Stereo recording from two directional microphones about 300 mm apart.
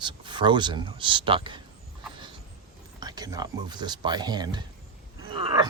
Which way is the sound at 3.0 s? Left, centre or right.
Centre.